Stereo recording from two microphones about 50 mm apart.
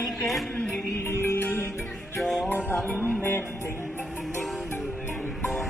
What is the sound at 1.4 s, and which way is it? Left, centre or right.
Music, left.